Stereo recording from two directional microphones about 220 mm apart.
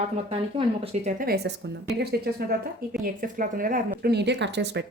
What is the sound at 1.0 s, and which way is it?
Speech, 40° right (ahead or behind).